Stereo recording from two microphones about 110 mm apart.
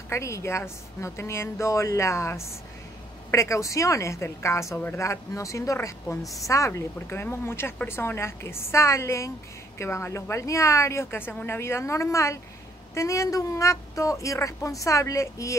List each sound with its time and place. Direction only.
0.1 s a woman's voice: 25° left (ahead or behind)